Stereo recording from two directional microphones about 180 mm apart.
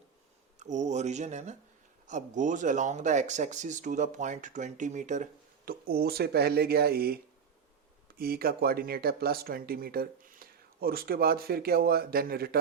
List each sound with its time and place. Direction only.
0.6 s speech: 40° right (ahead or behind); by 7.2 s 55° right (ahead or behind)
8.2 s speech: 55° right (ahead or behind)